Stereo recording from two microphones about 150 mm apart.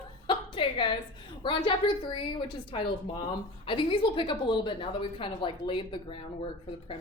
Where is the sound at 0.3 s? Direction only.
35° left (ahead or behind).